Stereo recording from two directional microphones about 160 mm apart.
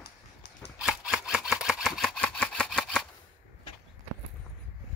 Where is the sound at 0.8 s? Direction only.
5° right (ahead or behind).